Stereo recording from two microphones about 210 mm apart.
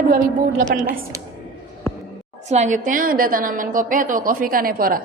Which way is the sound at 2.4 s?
35° right (ahead or behind).